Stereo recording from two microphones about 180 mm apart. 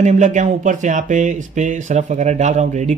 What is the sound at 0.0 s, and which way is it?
A man's voice, 40° right (ahead or behind).